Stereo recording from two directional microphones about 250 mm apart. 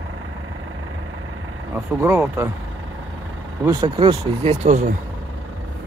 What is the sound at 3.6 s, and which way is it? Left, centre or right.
Speech, centre.